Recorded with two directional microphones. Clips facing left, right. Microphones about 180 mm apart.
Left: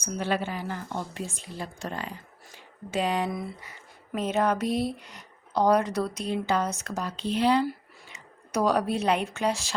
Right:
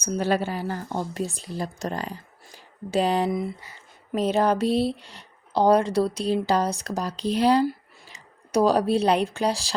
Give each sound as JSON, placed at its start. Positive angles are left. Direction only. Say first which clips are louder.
{"t": 0.0, "sound": "a woman's voice", "louder": "right 5 dB", "side_deg": -40}